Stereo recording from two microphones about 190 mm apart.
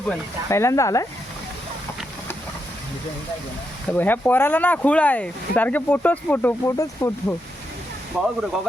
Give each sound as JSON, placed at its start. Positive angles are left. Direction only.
{"t": 0.1, "sound": "speech", "side_deg": 15}
{"t": 3.8, "sound": "speech", "side_deg": 10}
{"t": 8.1, "sound": "speech", "side_deg": 0}